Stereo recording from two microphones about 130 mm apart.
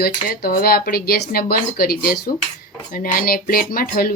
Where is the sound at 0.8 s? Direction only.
90° left.